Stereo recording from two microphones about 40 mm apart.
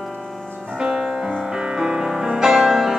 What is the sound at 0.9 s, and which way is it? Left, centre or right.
Music, centre.